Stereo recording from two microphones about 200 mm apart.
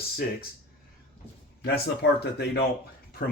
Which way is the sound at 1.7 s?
55° left (ahead or behind).